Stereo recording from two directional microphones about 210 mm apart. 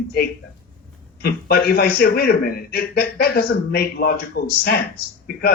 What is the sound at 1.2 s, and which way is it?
A man's voice, 45° left (ahead or behind).